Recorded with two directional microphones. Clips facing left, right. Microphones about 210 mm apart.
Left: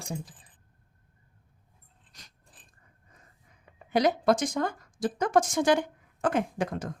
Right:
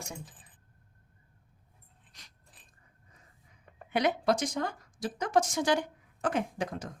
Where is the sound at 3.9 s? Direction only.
40° left (ahead or behind); by 6.9 s 55° left (ahead or behind).